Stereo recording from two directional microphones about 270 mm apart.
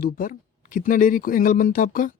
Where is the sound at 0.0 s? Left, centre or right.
Left.